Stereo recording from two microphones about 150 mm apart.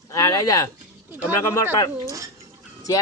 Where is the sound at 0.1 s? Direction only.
20° left (ahead or behind).